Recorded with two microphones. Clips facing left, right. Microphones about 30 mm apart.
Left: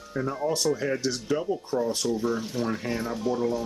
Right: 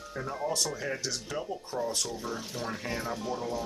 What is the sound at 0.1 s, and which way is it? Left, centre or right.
Speech, centre.